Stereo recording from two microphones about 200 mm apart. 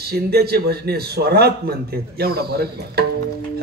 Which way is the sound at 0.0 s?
50° right (ahead or behind).